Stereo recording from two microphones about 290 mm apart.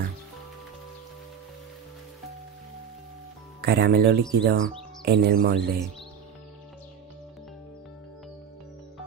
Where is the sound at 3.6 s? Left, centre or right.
Right.